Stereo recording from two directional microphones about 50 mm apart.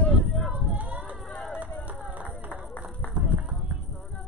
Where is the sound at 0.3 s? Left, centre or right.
Centre.